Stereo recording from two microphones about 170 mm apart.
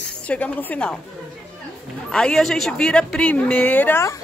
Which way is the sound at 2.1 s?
5° left (ahead or behind).